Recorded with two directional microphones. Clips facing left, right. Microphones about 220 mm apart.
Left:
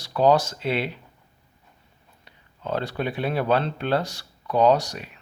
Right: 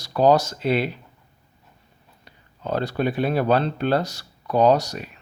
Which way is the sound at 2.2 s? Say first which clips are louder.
Right 2 dB; 40° right (ahead or behind).